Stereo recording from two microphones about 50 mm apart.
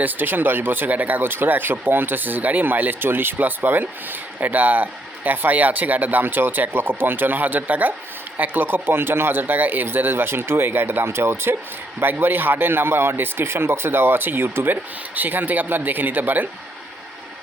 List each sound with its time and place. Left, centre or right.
0.0 s speech: right